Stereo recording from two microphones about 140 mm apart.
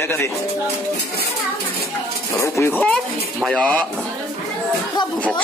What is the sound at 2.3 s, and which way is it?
Speech, 20° left (ahead or behind).